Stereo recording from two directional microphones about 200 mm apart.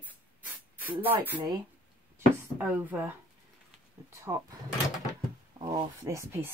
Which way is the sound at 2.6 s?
10° right (ahead or behind).